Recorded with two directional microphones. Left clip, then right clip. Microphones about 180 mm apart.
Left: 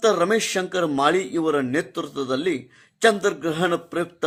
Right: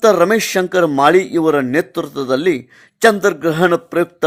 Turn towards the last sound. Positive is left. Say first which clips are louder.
# right 9 dB
turn(degrees=-40)  # may be behind; listen again after turning